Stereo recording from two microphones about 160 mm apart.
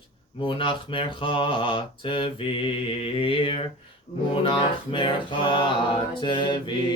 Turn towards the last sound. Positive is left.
turn(degrees=30)  # may be behind; listen again after turning